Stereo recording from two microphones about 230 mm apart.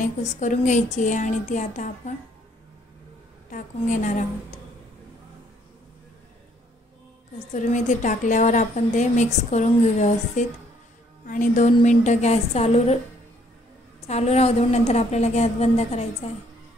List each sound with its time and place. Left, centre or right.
0.0 s a woman's voice: left
3.4 s a woman's voice: left
7.3 s a woman's voice: left
14.0 s a woman's voice: left